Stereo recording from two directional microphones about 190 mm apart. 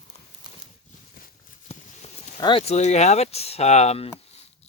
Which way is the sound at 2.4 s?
25° left (ahead or behind).